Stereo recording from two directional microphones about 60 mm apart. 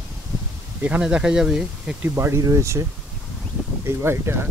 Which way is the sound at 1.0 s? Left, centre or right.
Centre.